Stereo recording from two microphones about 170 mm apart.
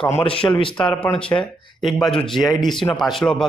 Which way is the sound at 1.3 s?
15° left (ahead or behind).